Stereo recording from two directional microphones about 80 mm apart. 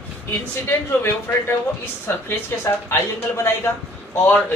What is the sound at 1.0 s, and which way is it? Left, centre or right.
Speech, left.